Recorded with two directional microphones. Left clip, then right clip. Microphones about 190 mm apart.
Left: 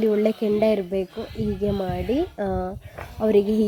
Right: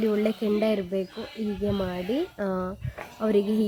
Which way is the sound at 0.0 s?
10° left (ahead or behind).